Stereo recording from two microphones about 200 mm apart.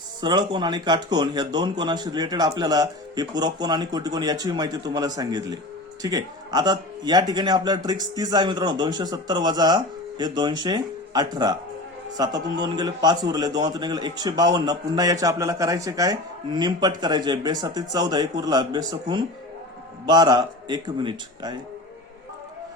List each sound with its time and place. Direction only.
0.2 s speech: 20° right (ahead or behind)